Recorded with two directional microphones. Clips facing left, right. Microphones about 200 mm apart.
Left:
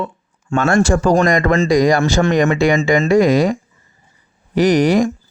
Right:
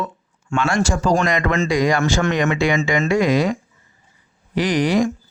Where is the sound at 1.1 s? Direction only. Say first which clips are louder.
Left 5 dB; 40° left (ahead or behind).